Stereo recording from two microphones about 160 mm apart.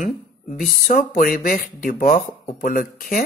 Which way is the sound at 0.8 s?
65° left (ahead or behind).